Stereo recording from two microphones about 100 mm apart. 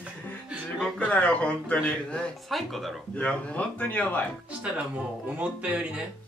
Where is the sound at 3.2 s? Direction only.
10° left (ahead or behind).